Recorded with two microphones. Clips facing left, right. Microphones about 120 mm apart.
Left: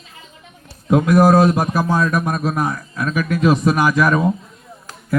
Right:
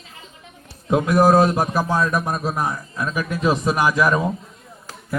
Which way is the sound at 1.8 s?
Centre (ahead or behind).